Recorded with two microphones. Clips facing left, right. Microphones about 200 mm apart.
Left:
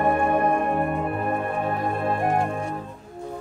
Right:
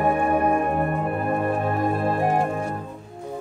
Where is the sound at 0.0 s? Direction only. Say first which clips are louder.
Even; 5° right (ahead or behind).